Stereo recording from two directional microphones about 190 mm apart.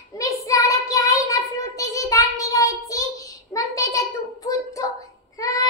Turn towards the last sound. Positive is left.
turn(degrees=20)  # may be behind; listen again after turning